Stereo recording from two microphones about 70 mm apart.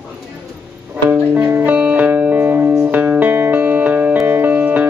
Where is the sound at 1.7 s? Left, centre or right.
Centre.